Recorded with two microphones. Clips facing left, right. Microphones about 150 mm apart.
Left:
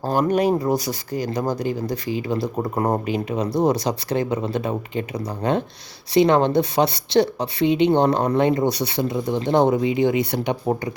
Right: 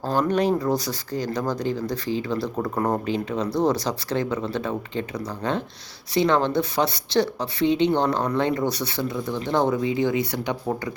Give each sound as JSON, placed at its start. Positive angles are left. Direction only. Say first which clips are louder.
{"t": 0.0, "sound": "speech", "louder": "left 3 dB", "side_deg": 15}
{"t": 2.6, "sound": "speech", "louder": "left 1 dB", "side_deg": 25}